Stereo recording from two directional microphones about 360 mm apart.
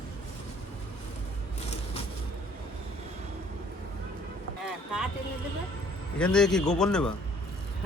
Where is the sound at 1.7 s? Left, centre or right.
Centre.